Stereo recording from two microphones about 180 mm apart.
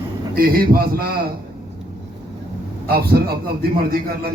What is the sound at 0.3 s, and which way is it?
Speech, 55° right (ahead or behind).